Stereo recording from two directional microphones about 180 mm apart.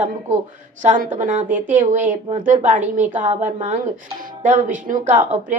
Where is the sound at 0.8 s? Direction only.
45° right (ahead or behind).